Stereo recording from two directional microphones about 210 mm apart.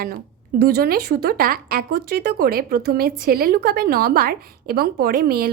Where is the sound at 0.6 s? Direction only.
45° right (ahead or behind).